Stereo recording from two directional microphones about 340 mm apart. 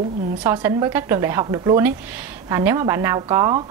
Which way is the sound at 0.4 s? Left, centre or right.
Centre.